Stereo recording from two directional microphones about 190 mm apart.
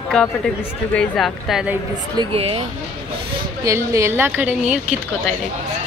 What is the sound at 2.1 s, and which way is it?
Speech, 30° right (ahead or behind).